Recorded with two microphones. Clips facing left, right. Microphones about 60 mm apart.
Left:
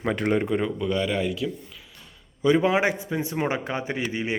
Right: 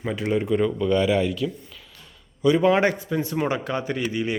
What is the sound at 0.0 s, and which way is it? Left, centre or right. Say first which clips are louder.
Speech: left 1 dB; left.